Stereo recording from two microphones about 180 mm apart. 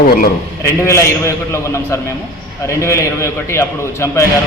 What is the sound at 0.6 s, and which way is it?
A man's voice, 15° left (ahead or behind).